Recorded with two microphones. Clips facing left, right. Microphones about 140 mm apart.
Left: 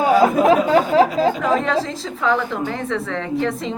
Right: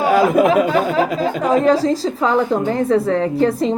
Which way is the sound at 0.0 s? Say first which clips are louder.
Right 1 dB; 75° right (ahead or behind).